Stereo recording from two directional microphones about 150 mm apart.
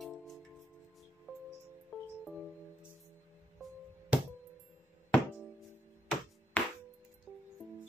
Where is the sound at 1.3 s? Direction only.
10° right (ahead or behind).